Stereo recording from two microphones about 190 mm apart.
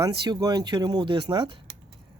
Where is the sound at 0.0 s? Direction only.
20° right (ahead or behind).